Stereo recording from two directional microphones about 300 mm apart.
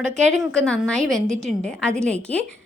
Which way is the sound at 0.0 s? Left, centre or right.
Right.